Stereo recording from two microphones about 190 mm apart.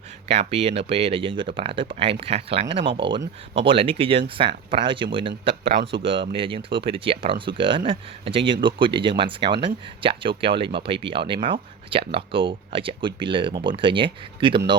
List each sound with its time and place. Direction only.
0.3 s speech: 30° right (ahead or behind)